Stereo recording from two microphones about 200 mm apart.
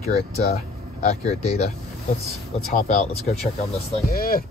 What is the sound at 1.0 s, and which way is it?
Speech, 35° left (ahead or behind).